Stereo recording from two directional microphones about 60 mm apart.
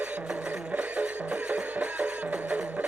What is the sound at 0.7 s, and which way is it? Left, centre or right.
Music, right.